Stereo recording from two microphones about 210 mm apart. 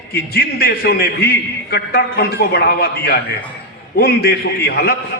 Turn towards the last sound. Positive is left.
turn(degrees=50)  # may be behind; listen again after turning